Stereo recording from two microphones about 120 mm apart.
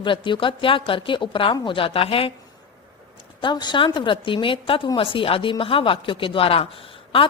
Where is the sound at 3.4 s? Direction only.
40° left (ahead or behind).